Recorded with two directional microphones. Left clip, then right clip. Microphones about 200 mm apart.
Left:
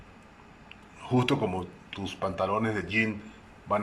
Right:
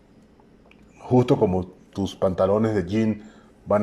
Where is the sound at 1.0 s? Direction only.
25° right (ahead or behind).